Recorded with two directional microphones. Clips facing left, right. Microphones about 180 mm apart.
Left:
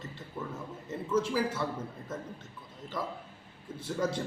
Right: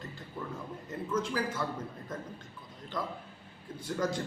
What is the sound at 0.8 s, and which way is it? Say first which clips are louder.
Speech: left 3 dB; 10° left (ahead or behind).